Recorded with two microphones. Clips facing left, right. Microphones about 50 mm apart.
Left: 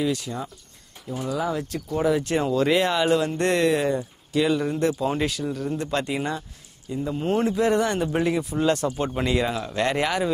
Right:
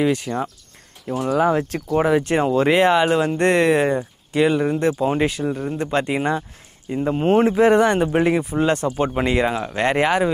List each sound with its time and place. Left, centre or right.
0.0 s speech: right
1.0 s speech: right
6.9 s speech: right